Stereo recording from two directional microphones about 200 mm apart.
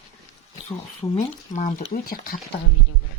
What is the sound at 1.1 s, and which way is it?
Speech, 35° left (ahead or behind).